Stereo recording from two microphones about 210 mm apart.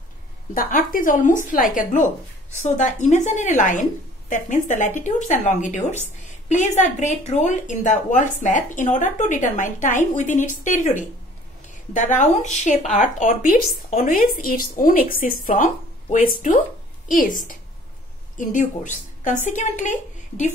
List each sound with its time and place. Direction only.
0.6 s a woman's voice: 40° left (ahead or behind)